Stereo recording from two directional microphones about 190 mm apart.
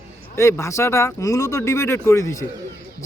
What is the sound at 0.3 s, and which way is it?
A man's voice, 15° left (ahead or behind).